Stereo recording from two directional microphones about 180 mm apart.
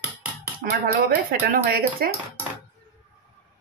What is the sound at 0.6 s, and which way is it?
Speech, 55° right (ahead or behind).